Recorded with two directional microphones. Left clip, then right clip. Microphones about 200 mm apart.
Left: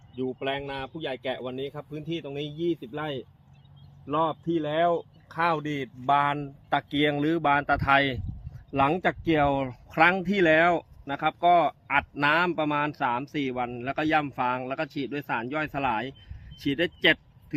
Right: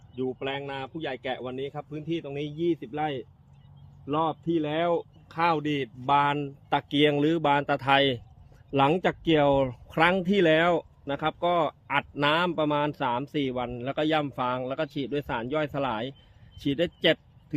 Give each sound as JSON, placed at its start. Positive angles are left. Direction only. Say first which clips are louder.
{"t": 0.1, "sound": "a man's voice", "louder": "left 1 dB", "side_deg": 0}
{"t": 4.0, "sound": "speech", "louder": "left 1 dB", "side_deg": -30}